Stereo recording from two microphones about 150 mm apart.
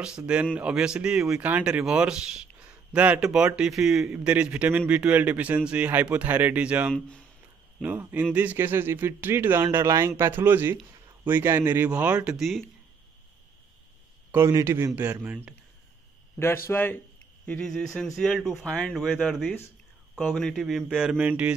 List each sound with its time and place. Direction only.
0.0 s speech: 5° right (ahead or behind)
6.9 s speech: 5° left (ahead or behind)
7.8 s speech: 10° right (ahead or behind)
14.3 s speech: 20° right (ahead or behind)
16.6 s speech: 15° left (ahead or behind); by 21.5 s 10° right (ahead or behind)